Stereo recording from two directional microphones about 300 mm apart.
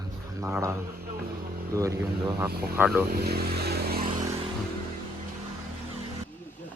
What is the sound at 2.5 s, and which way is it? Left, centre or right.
Speech, right.